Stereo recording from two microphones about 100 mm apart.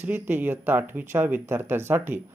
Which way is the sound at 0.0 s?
20° right (ahead or behind).